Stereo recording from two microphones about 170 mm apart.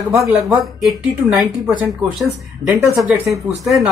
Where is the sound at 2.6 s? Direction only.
20° right (ahead or behind).